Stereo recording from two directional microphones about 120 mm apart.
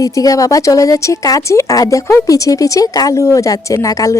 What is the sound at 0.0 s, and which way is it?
A woman's voice, 30° left (ahead or behind).